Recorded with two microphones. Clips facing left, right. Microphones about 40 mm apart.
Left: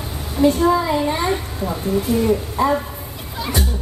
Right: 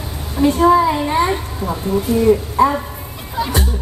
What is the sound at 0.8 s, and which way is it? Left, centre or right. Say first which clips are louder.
Child singing: right 2 dB; centre.